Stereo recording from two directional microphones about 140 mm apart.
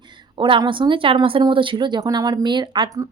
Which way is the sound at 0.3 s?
35° right (ahead or behind).